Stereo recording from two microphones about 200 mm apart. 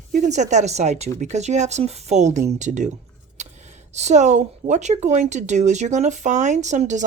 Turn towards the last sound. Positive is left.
turn(degrees=-35)  # may be behind; listen again after turning